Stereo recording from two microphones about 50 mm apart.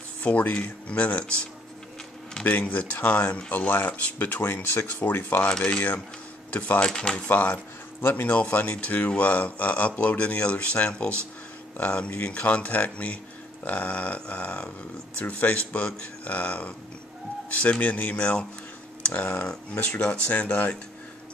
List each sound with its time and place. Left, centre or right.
0.2 s speech: left
2.4 s speech: left
4.4 s speech: left
6.8 s speech: centre
7.2 s speech: left
8.3 s speech: left